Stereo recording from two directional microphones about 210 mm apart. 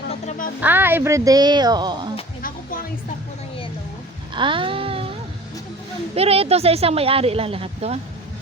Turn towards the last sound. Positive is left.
turn(degrees=-30)  # may be behind; listen again after turning